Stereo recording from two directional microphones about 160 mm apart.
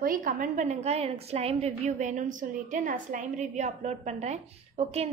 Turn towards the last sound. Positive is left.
turn(degrees=-40)  # may be behind; listen again after turning